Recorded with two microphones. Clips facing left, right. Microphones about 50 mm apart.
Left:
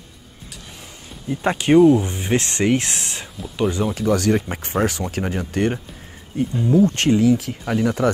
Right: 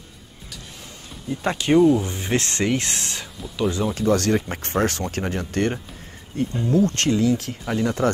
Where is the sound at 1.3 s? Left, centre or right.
Centre.